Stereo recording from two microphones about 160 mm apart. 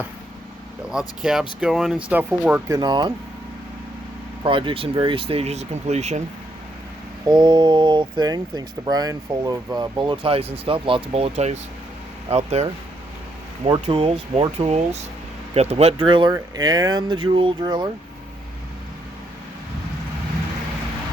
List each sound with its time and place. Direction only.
0.9 s speech: 5° right (ahead or behind)
2.6 s speech: 25° right (ahead or behind)
4.4 s speech: 30° right (ahead or behind)
7.3 s speech: 30° right (ahead or behind)
13.8 s speech: 35° right (ahead or behind)